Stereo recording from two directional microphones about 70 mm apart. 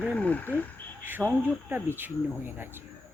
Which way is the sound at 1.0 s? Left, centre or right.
Right.